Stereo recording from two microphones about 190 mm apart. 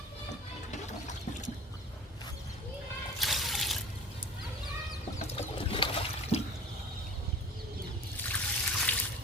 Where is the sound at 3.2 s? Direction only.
Centre (ahead or behind).